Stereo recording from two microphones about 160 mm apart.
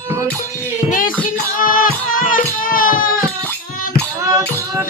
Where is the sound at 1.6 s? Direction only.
60° left (ahead or behind).